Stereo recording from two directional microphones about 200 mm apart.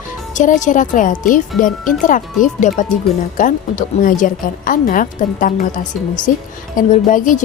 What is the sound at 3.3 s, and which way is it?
Speech, 40° left (ahead or behind).